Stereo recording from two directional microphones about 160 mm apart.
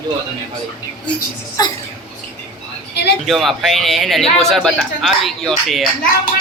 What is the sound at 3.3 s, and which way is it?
Speech, centre (ahead or behind).